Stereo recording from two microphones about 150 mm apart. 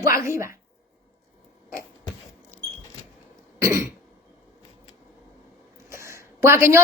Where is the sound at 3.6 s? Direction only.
20° right (ahead or behind).